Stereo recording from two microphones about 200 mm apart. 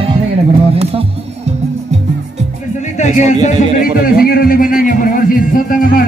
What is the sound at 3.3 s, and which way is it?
Speech, 35° left (ahead or behind).